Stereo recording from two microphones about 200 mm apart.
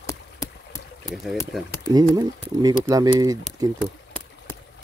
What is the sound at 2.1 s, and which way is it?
Speech, 20° right (ahead or behind).